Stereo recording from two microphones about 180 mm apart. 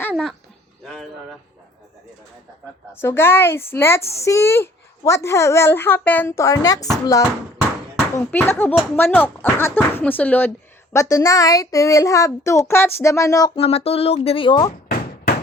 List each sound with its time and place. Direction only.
0.0 s a sound: 5° left (ahead or behind)
2.9 s speech: 15° left (ahead or behind)
13.6 s speech: 35° left (ahead or behind)